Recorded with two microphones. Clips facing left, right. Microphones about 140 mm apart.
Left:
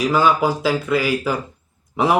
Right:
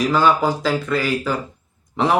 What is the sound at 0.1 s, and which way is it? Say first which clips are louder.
A man's voice: even; 10° left (ahead or behind).